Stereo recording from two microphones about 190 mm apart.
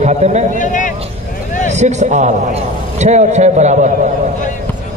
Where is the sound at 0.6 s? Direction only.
40° left (ahead or behind).